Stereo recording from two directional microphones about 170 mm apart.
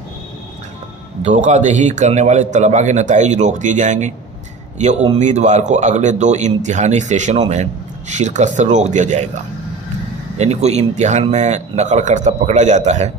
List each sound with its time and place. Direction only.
1.2 s a man's voice: 45° right (ahead or behind)
10.3 s a man's voice: 40° right (ahead or behind)